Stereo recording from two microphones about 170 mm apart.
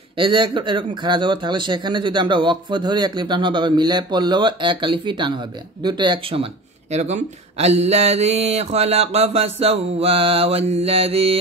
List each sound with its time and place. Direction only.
0.2 s speech: 30° right (ahead or behind)